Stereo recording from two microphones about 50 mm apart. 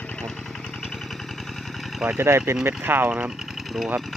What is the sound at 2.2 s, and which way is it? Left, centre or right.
Speech, right.